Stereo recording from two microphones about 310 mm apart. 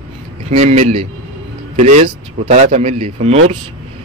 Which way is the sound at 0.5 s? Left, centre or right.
Right.